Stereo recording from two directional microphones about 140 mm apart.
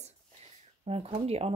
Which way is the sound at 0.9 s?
45° right (ahead or behind).